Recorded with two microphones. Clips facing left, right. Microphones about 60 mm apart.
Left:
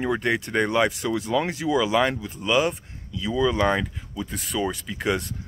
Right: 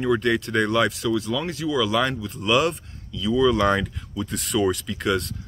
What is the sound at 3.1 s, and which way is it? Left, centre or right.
Speech, left.